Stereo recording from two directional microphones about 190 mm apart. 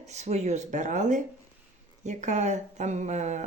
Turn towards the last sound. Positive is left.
turn(degrees=-40)  # may be behind; listen again after turning